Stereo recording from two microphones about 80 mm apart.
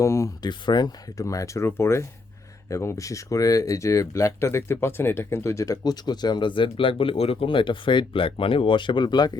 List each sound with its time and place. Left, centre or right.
0.0 s speech: left
0.4 s speech: left